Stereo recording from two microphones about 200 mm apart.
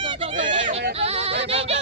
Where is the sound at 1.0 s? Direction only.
30° right (ahead or behind).